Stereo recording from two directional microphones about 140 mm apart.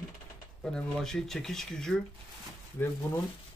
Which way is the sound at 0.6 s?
5° left (ahead or behind).